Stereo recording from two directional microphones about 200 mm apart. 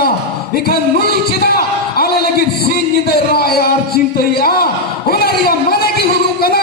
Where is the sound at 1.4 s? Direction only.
50° left (ahead or behind).